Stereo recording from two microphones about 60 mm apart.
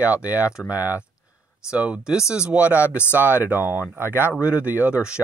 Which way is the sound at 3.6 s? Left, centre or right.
Left.